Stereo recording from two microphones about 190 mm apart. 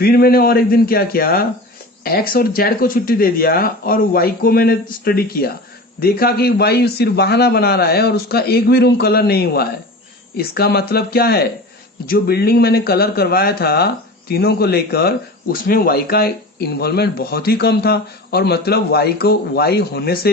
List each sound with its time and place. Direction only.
0.0 s speech: 55° left (ahead or behind)